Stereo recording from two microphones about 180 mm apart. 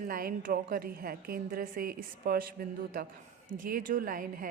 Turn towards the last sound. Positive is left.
turn(degrees=-50)  # may be behind; listen again after turning